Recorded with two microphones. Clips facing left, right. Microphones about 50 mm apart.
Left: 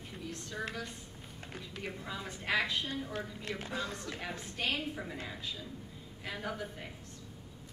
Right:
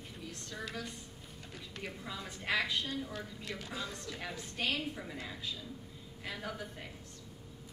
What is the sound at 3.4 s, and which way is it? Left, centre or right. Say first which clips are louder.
Speech: left 3 dB; left.